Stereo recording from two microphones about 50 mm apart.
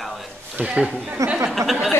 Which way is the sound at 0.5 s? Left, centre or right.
Right.